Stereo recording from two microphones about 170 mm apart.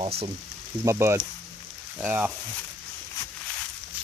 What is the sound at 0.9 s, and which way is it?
Speech, 15° right (ahead or behind).